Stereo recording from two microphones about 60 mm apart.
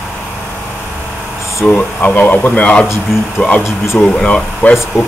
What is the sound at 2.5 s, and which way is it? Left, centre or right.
A man's voice, centre.